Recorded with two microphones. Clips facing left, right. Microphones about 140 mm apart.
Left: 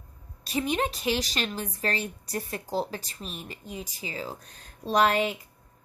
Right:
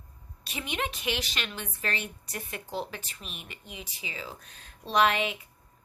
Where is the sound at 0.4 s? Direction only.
40° left (ahead or behind).